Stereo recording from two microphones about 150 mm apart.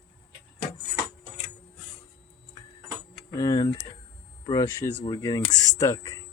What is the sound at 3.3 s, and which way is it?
Speech, 25° left (ahead or behind).